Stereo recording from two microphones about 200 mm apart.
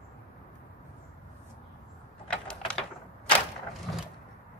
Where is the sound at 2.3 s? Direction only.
5° left (ahead or behind).